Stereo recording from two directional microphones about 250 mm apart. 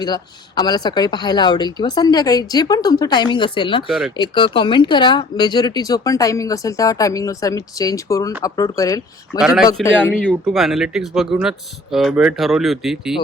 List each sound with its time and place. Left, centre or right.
0.0 s speech: centre
3.8 s speech: centre
4.2 s speech: centre
9.8 s speech: centre